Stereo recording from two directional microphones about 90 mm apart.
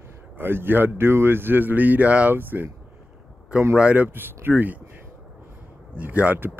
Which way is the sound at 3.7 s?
15° right (ahead or behind).